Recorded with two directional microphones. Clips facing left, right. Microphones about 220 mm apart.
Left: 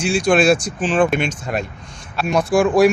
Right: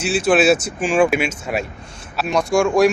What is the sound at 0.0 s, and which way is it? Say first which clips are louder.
A man's voice: even; 5° right (ahead or behind).